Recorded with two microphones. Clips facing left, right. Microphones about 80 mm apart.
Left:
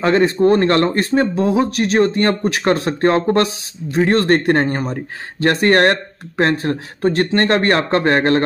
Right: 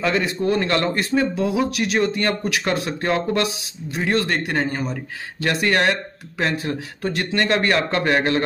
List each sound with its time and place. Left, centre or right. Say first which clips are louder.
0.0 s speech: left 8 dB; left